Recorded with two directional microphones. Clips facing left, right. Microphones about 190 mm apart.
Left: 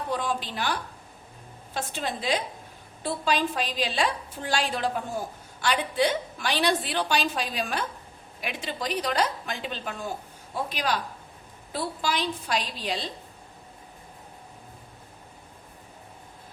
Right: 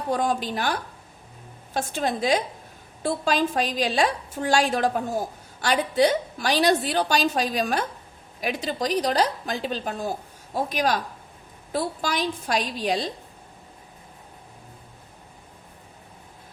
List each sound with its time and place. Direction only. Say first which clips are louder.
0.1 s a woman's voice: right 6 dB; 45° right (ahead or behind)